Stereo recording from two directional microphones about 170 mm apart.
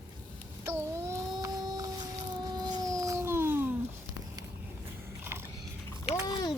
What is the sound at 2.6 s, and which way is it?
Dog, 25° right (ahead or behind).